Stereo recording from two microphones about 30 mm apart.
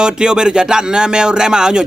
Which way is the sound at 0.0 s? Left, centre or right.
Right.